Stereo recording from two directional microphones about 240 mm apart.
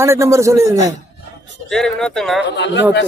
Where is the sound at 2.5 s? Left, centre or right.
Left.